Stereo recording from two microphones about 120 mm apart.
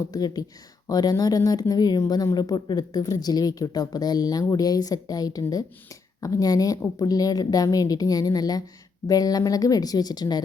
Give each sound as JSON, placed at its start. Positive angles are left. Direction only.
{"t": 0.0, "sound": "speech", "side_deg": 30}